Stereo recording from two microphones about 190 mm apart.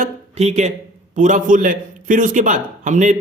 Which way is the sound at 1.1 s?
40° right (ahead or behind).